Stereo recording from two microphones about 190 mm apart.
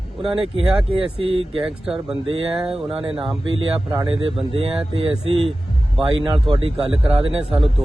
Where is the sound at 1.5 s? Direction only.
5° right (ahead or behind).